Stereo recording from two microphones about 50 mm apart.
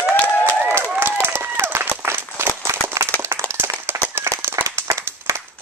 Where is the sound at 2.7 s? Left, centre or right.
Right.